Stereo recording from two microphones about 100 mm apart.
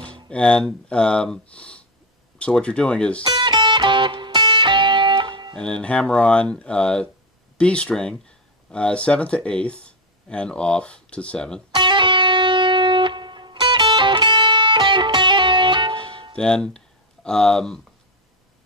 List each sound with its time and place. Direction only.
0.1 s a sound: 10° left (ahead or behind)
0.7 s speech: 10° left (ahead or behind)
3.3 s music: 50° right (ahead or behind)
5.6 s speech: 10° left (ahead or behind)
11.7 s music: 50° right (ahead or behind)
16.3 s speech: 10° left (ahead or behind)